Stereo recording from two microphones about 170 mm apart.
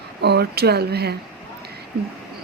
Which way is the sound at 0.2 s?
75° right (ahead or behind).